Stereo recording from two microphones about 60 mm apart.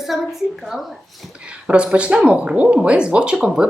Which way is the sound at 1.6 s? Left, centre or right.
Centre.